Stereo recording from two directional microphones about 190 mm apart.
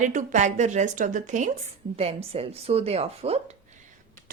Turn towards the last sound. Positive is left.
turn(degrees=-30)  # may be behind; listen again after turning